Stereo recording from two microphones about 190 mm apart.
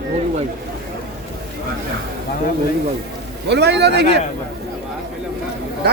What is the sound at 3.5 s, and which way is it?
Speech, 65° right (ahead or behind).